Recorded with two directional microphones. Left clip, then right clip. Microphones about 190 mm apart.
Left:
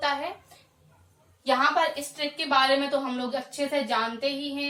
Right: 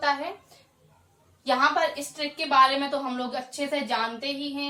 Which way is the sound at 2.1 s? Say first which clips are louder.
Right 4 dB; 10° left (ahead or behind).